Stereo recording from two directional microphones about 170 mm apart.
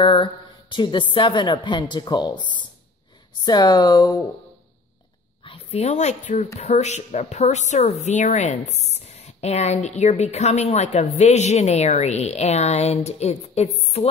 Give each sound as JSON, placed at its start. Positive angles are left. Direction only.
{"t": 0.0, "sound": "speech", "side_deg": 30}
{"t": 3.4, "sound": "speech", "side_deg": 25}
{"t": 5.4, "sound": "speech", "side_deg": 35}
{"t": 13.7, "sound": "a sound", "side_deg": 40}